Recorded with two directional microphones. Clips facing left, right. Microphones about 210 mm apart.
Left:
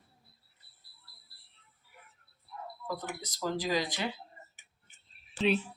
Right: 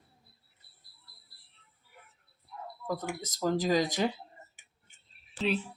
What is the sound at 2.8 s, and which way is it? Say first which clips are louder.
Speech: right 4 dB; 45° right (ahead or behind).